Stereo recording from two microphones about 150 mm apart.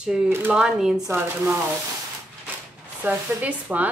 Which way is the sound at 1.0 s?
20° right (ahead or behind).